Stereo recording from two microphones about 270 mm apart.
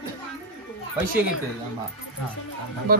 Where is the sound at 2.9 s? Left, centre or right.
Right.